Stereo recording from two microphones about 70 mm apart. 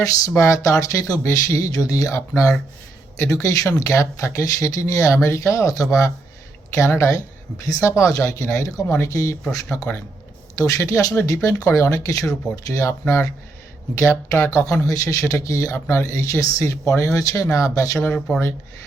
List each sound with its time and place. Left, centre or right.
0.0 s speech: left
12.2 s speech: centre
12.6 s speech: left